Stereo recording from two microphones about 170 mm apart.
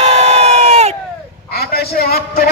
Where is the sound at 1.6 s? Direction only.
65° left (ahead or behind).